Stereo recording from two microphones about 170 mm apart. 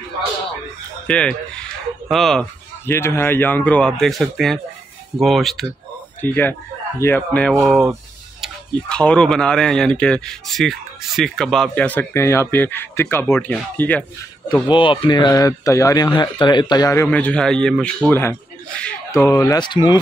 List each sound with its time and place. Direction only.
1.0 s speech: 5° left (ahead or behind)
2.9 s speech: 15° left (ahead or behind)
14.7 s speech: 30° left (ahead or behind)